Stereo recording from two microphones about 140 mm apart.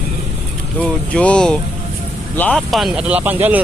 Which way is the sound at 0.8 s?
10° left (ahead or behind).